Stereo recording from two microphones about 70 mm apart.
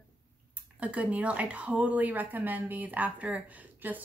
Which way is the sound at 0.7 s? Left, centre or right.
Centre.